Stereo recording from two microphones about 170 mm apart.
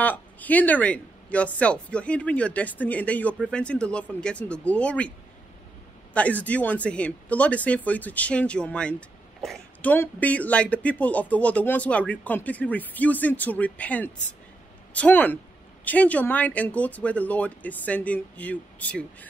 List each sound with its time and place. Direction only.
0.0 s speech: 10° left (ahead or behind)
6.1 s speech: 10° left (ahead or behind)